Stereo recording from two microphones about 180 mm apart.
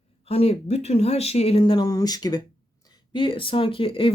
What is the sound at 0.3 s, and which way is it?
Speech, 35° left (ahead or behind).